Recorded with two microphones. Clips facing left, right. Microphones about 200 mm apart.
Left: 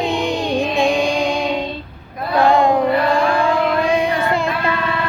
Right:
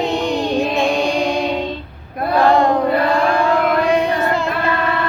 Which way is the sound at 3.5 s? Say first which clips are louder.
Right 1 dB; 60° right (ahead or behind).